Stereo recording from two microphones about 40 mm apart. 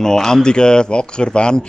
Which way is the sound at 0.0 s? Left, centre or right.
Centre.